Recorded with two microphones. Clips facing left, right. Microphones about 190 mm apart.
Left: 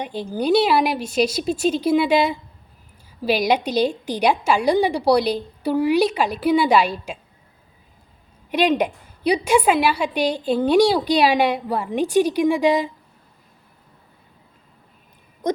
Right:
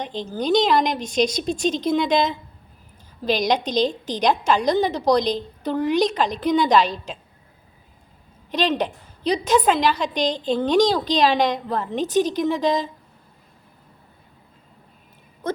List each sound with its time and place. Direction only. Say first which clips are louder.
0.0 s a woman's voice: left 2 dB; 10° left (ahead or behind)
8.4 s a woman's voice: left 3 dB; 10° left (ahead or behind)
15.4 s a sound: left 4 dB; 15° left (ahead or behind)